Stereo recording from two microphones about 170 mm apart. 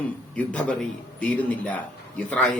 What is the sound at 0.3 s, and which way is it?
A man's voice, 5° left (ahead or behind).